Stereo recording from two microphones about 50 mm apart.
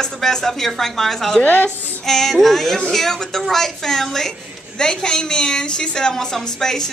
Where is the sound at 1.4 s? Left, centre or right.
Left.